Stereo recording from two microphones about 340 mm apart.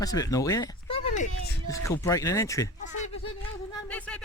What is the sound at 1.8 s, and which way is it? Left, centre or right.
Speech, centre.